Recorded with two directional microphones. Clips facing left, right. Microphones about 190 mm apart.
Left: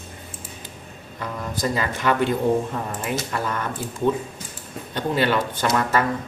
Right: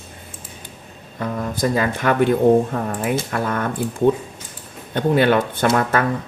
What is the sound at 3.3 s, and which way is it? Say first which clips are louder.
Speech: right 4 dB; 55° right (ahead or behind).